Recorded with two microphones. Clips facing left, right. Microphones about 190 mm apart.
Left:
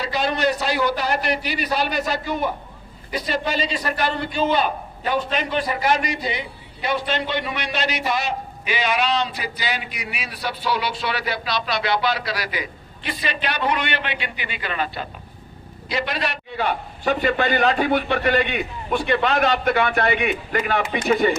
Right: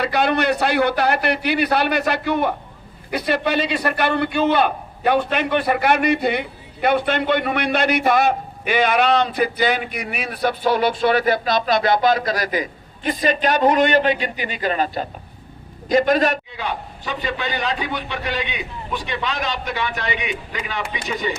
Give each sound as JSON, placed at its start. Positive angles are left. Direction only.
{"t": 0.0, "sound": "a man's voice", "side_deg": -60}
{"t": 16.6, "sound": "a man's voice", "side_deg": 55}